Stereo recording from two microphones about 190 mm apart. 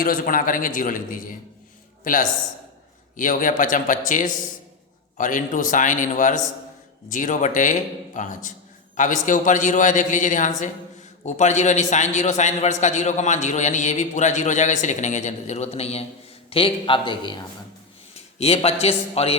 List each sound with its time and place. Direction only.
0.0 s speech: 45° left (ahead or behind)
3.2 s a man's voice: 45° left (ahead or behind)